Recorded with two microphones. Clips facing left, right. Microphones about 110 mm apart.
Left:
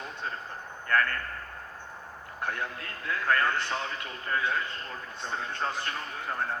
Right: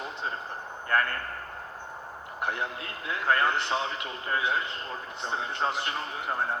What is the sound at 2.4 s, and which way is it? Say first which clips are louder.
A man's voice: right 2 dB; 20° right (ahead or behind).